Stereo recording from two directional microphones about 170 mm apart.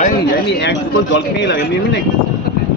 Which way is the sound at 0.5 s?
90° left.